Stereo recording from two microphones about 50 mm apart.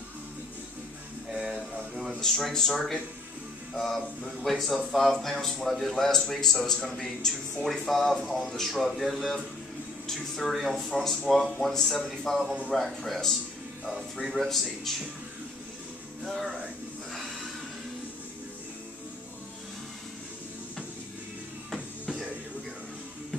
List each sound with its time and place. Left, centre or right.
1.3 s a sound: centre
2.2 s speech: centre
3.7 s speech: centre
13.8 s speech: centre
14.9 s speech: centre
16.3 s speech: centre
21.7 s music: centre